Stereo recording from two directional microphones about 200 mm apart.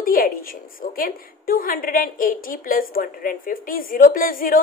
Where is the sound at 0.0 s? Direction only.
45° left (ahead or behind).